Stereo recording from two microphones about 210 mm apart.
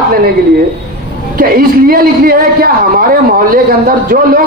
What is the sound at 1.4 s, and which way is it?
A man's voice, 45° right (ahead or behind).